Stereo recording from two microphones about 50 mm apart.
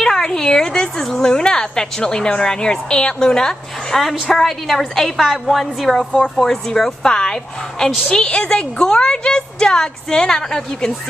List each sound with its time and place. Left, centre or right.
0.0 s a woman's voice: centre
4.0 s a woman's voice: centre